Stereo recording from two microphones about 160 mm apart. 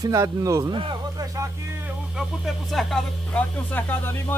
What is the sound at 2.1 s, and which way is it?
Speech, centre (ahead or behind).